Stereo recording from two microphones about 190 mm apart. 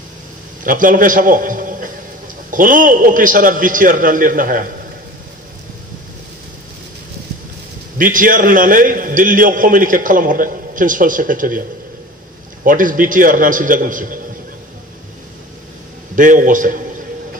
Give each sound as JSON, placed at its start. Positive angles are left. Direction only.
{"t": 0.7, "sound": "a man's voice", "side_deg": -45}
{"t": 8.0, "sound": "a man's voice", "side_deg": -45}
{"t": 12.6, "sound": "a man's voice", "side_deg": -45}
{"t": 16.2, "sound": "a man's voice", "side_deg": -45}